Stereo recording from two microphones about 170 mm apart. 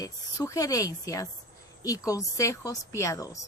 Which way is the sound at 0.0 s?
20° left (ahead or behind).